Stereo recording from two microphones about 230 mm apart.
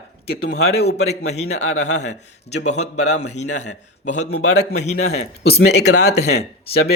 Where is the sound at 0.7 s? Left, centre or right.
Left.